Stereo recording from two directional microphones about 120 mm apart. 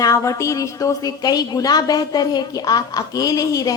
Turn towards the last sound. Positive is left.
turn(degrees=30)  # may be behind; listen again after turning